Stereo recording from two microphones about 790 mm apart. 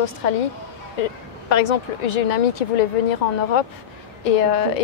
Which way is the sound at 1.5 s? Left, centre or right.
Left.